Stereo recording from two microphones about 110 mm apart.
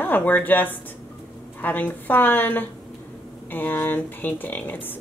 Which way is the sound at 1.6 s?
15° left (ahead or behind).